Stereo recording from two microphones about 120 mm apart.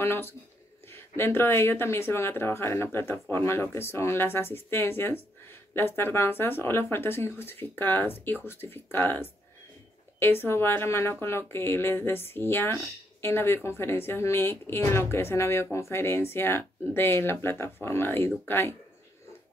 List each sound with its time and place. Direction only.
0.0 s speech: 20° left (ahead or behind)